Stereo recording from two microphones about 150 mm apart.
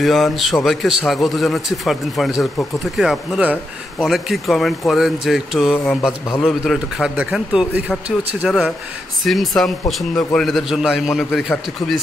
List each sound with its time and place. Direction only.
0.0 s speech: centre (ahead or behind)